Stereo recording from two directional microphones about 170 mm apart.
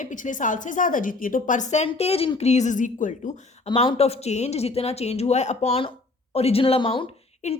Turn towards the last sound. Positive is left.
turn(degrees=30)  # may be behind; listen again after turning